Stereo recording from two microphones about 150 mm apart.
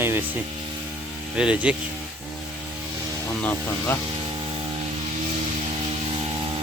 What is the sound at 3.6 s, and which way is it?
Speech, 15° left (ahead or behind).